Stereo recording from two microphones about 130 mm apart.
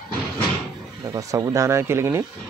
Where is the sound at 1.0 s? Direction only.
25° right (ahead or behind).